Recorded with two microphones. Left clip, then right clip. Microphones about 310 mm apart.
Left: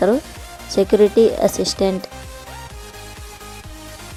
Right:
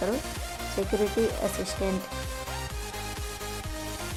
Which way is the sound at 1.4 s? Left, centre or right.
Centre.